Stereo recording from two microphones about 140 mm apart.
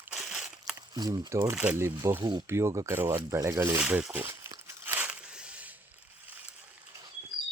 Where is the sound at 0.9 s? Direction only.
30° right (ahead or behind).